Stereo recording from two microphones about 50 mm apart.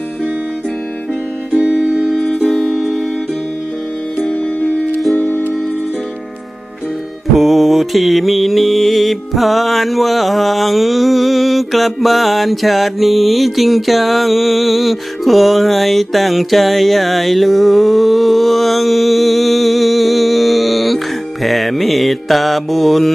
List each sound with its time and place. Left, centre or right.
1.5 s music: centre
2.5 s music: centre
4.3 s music: left
5.1 s music: left
7.3 s music: centre
21.4 s mantra: centre